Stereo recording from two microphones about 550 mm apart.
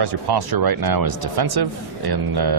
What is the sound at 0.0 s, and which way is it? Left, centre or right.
Speech, right.